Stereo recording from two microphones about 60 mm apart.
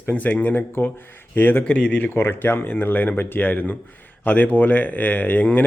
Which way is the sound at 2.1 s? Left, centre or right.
Left.